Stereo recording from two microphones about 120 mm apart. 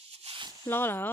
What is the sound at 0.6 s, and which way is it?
Speech, 20° left (ahead or behind).